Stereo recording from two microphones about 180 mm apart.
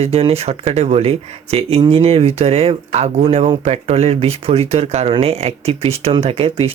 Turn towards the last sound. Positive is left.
turn(degrees=-30)  # may be behind; listen again after turning